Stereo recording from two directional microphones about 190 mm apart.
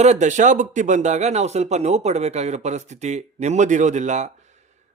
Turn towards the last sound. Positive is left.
turn(degrees=-40)  # may be behind; listen again after turning